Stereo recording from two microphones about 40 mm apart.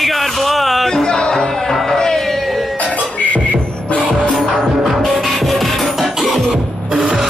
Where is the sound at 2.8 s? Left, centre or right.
Left.